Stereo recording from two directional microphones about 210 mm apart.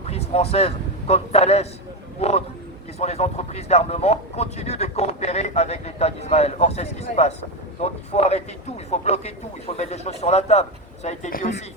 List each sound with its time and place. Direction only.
0.0 s a man's voice: 30° left (ahead or behind)